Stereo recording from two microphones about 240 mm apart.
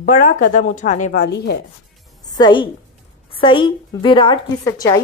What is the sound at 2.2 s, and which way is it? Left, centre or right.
A woman's voice, centre.